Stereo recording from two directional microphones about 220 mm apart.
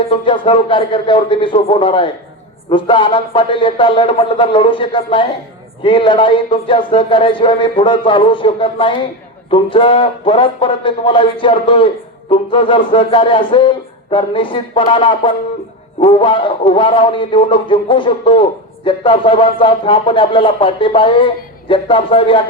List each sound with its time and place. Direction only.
0.1 s speech: 25° left (ahead or behind)